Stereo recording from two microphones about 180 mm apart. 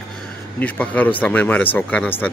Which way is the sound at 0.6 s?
10° left (ahead or behind).